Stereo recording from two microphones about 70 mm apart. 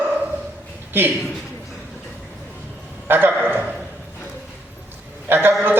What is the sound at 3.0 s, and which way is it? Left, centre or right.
Speech, right.